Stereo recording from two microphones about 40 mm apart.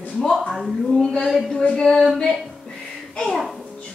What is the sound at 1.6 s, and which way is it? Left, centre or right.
Speech, left.